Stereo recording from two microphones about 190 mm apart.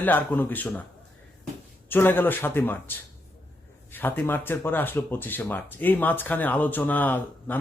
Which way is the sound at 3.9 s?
10° left (ahead or behind).